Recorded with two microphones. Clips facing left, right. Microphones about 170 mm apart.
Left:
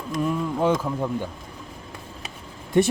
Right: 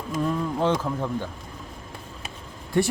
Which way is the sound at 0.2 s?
10° left (ahead or behind).